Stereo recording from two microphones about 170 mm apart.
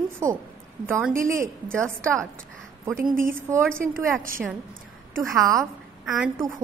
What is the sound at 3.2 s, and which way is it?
Speech, 15° right (ahead or behind).